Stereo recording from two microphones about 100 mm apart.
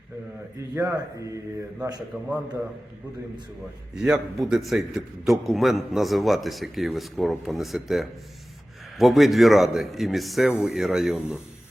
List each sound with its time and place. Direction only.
0.8 s a man's voice: 30° right (ahead or behind)
2.1 s a man's voice: 5° right (ahead or behind)
3.9 s a man's voice: 5° right (ahead or behind)